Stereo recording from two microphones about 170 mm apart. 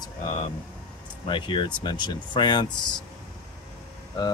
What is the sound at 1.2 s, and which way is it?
Speech, 30° left (ahead or behind).